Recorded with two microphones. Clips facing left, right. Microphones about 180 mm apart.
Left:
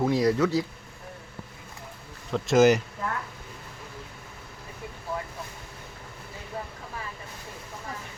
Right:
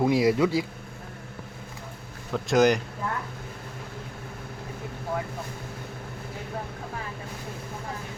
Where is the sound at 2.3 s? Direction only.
Centre (ahead or behind).